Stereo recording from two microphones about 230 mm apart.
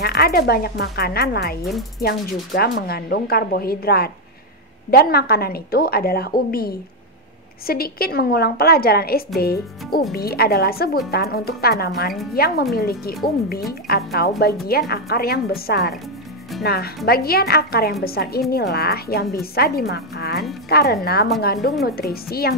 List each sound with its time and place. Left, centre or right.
0.0 s speech: left